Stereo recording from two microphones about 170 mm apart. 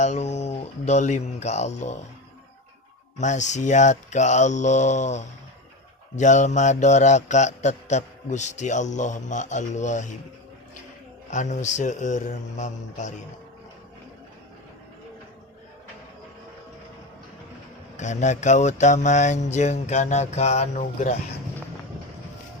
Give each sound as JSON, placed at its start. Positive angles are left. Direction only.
{"t": 0.0, "sound": "speech", "side_deg": 40}
{"t": 3.2, "sound": "mantra", "side_deg": 45}
{"t": 11.3, "sound": "mantra", "side_deg": 45}
{"t": 17.9, "sound": "mantra", "side_deg": 45}